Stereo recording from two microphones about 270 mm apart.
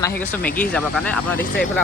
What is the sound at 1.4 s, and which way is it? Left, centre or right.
Speech, left.